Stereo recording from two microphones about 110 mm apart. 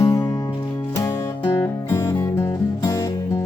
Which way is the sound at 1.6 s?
25° left (ahead or behind).